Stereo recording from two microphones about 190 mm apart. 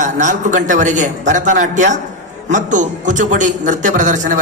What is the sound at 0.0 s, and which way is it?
A woman's voice, 40° right (ahead or behind).